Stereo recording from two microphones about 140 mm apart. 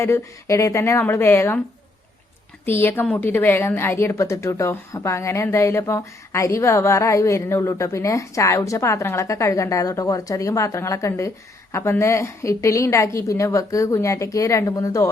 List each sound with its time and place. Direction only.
0.0 s a woman's voice: 20° left (ahead or behind)
2.6 s a woman's voice: 15° left (ahead or behind)